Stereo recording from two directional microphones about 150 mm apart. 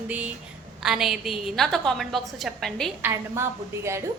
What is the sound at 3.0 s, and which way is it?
Speech, 15° right (ahead or behind).